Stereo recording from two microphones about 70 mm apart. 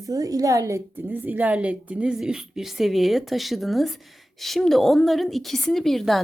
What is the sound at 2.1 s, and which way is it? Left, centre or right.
Speech, centre.